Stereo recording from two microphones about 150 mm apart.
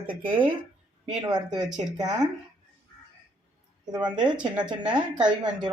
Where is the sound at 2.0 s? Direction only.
25° right (ahead or behind).